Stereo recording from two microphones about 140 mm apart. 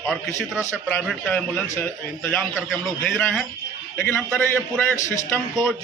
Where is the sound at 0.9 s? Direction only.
10° left (ahead or behind).